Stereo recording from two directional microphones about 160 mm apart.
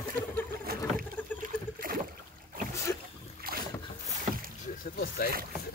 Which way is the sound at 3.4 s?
65° right (ahead or behind).